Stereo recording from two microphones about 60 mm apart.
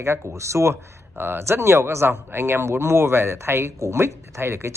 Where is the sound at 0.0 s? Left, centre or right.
Right.